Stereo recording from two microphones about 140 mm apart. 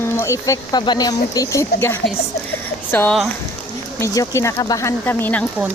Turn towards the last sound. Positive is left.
turn(degrees=15)  # may be behind; listen again after turning